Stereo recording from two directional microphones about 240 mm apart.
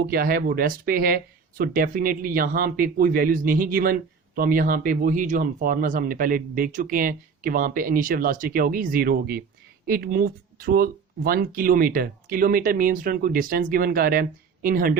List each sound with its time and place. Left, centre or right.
0.1 s speech: right